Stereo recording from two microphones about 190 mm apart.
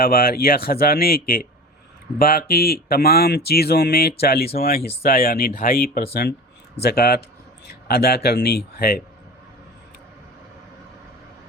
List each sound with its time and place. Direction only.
0.0 s speech: 50° left (ahead or behind)